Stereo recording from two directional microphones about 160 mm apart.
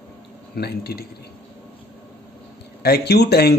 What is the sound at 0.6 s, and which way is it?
Speech, 85° left.